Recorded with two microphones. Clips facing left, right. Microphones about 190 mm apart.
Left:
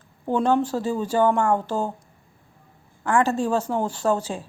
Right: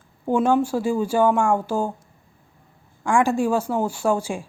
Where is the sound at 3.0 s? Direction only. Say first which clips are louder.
Right 2 dB; 10° right (ahead or behind).